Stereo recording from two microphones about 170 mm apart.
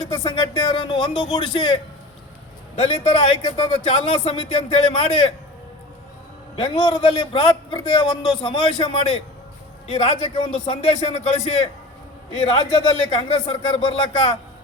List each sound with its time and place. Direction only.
0.0 s a man's voice: 30° left (ahead or behind)
2.8 s speech: 35° left (ahead or behind)
6.6 s a man's voice: 30° left (ahead or behind)